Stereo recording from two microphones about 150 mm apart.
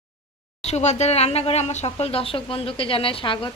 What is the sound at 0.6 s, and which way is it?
Speech, 50° left (ahead or behind).